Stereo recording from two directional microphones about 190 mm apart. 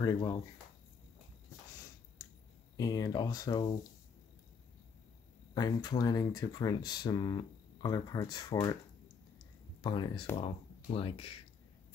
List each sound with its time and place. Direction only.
0.0 s speech: 20° left (ahead or behind)
2.8 s speech: 20° left (ahead or behind)
5.5 s speech: 20° left (ahead or behind)
9.8 s speech: 25° left (ahead or behind)